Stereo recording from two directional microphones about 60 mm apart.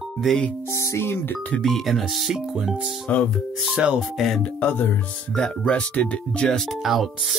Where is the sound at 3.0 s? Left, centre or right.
Centre.